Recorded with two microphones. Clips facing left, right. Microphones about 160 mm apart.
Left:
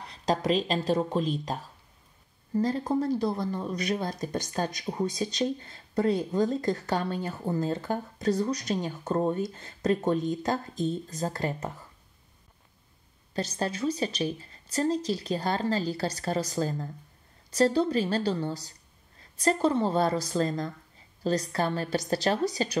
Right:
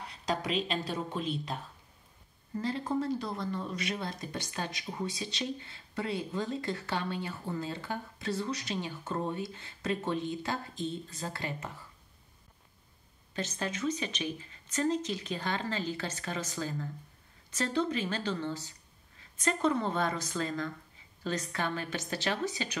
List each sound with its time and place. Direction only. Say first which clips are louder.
0.0 s a woman's voice: left 6 dB; 35° left (ahead or behind)
13.3 s a woman's voice: left 5 dB; 35° left (ahead or behind)